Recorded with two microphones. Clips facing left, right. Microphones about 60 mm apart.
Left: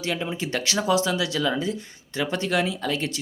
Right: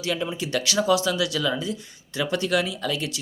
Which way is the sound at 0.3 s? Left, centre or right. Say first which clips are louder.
Right 1 dB; left.